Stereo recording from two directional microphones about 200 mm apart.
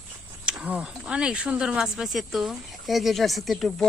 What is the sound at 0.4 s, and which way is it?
Speech, 5° right (ahead or behind).